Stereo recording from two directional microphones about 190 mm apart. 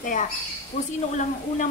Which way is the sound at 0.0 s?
45° left (ahead or behind).